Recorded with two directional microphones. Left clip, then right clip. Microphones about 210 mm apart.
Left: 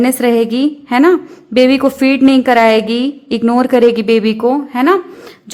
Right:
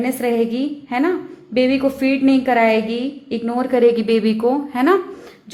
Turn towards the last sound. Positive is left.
turn(degrees=20)  # may be behind; listen again after turning